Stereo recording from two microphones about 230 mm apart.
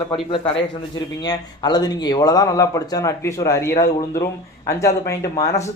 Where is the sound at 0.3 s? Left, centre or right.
Left.